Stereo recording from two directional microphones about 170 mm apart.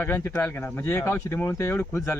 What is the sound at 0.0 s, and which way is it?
Speech, 15° left (ahead or behind).